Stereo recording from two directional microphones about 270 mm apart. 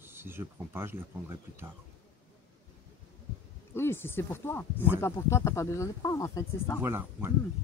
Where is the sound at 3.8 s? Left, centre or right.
Centre.